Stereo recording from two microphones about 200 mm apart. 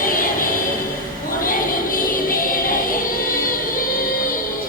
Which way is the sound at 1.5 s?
45° left (ahead or behind).